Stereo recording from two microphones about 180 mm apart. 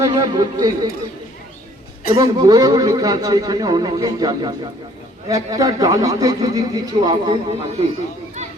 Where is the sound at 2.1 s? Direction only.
20° right (ahead or behind).